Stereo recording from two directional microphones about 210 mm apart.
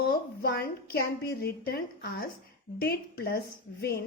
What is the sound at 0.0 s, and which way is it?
A woman's voice, 45° left (ahead or behind).